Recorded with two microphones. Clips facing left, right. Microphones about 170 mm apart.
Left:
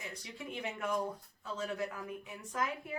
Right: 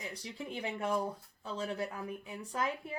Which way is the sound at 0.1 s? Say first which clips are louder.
Right 2 dB; 30° right (ahead or behind).